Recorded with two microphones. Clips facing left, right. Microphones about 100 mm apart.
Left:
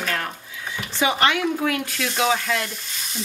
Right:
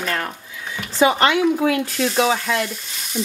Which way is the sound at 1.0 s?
30° right (ahead or behind).